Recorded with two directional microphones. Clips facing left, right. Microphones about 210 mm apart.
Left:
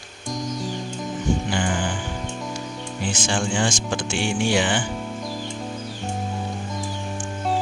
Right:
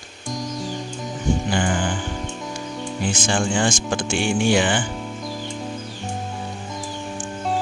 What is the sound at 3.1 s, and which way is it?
Speech, 50° right (ahead or behind).